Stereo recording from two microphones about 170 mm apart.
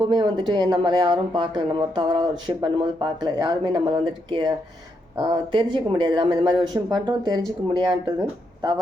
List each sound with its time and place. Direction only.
0.0 s speech: 25° right (ahead or behind)